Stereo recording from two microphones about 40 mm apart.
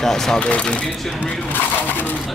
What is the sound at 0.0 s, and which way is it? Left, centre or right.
Speech, centre.